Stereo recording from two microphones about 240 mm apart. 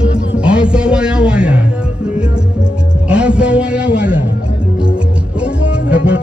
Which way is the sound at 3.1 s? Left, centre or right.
Centre.